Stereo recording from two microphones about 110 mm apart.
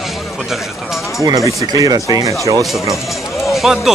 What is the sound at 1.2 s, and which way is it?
Speech, 35° right (ahead or behind).